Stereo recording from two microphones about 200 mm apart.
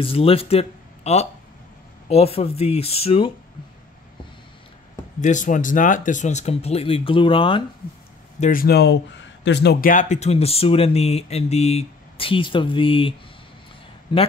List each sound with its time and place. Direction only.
0.0 s speech: 30° left (ahead or behind)
5.2 s speech: 40° left (ahead or behind)
8.4 s speech: 45° left (ahead or behind); by 14.2 s 25° left (ahead or behind)